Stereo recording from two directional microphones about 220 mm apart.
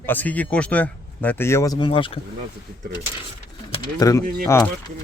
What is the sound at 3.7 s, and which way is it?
Speech, 15° left (ahead or behind).